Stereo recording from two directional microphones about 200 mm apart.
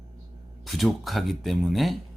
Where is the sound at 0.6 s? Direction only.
Centre (ahead or behind).